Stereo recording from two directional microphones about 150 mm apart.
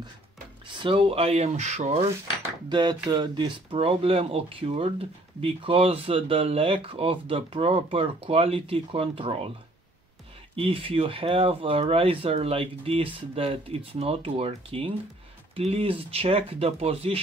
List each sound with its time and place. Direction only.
0.7 s speech: 35° right (ahead or behind)
2.7 s speech: 30° right (ahead or behind)
10.5 s speech: 35° right (ahead or behind)